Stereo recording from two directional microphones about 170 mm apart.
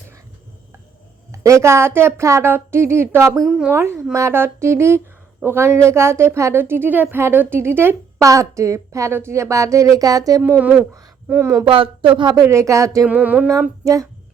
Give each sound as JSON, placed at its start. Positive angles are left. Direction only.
{"t": 1.3, "sound": "speech", "side_deg": -15}
{"t": 3.4, "sound": "speech", "side_deg": -5}
{"t": 10.4, "sound": "speech", "side_deg": -10}
{"t": 11.6, "sound": "speech", "side_deg": -30}
{"t": 13.1, "sound": "speech", "side_deg": -10}
{"t": 13.8, "sound": "speech", "side_deg": -20}